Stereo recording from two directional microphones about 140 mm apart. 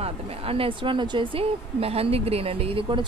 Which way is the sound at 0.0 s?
45° right (ahead or behind).